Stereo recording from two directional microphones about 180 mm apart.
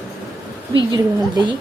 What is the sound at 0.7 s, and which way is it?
Speech, 25° right (ahead or behind).